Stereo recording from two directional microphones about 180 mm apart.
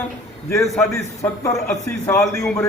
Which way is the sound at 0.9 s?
15° left (ahead or behind).